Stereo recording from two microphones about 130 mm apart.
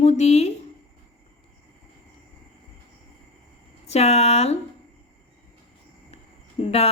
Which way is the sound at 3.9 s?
55° left (ahead or behind).